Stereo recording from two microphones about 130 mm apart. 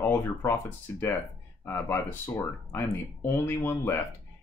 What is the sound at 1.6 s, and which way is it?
Speech, 20° left (ahead or behind).